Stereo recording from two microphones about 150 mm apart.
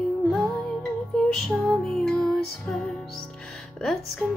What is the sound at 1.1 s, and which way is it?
Music, centre (ahead or behind).